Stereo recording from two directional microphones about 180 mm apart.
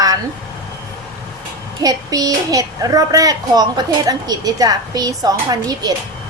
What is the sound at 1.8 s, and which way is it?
A woman's voice, 20° right (ahead or behind).